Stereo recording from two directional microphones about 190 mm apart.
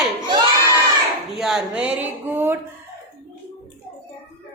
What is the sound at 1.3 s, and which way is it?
A woman's voice, centre (ahead or behind).